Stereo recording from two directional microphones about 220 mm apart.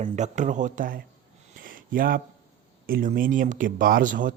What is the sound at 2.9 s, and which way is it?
Speech, 40° right (ahead or behind).